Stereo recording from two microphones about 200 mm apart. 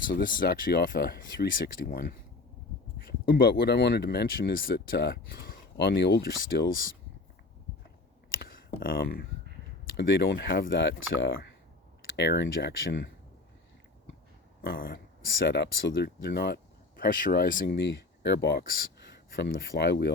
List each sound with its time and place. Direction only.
0.1 s speech: 45° left (ahead or behind)
8.4 s a sound: 50° left (ahead or behind)
10.0 s speech: 55° left (ahead or behind)
14.8 s speech: 55° left (ahead or behind)
17.7 s speech: 60° left (ahead or behind)